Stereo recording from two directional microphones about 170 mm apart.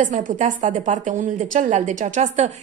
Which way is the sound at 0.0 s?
50° right (ahead or behind).